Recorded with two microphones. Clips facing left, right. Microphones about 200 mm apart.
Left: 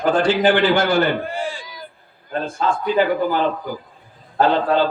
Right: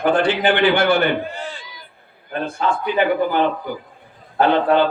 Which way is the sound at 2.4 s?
60° right (ahead or behind).